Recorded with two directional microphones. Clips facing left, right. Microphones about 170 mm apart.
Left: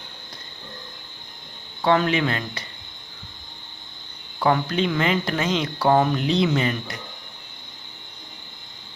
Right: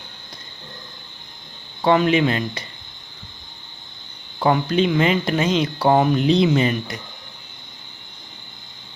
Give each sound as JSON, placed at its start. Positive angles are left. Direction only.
{"t": 1.8, "sound": "speech", "side_deg": -20}
{"t": 4.4, "sound": "speech", "side_deg": -20}